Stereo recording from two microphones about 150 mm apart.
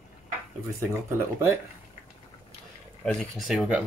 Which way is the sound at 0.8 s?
15° right (ahead or behind).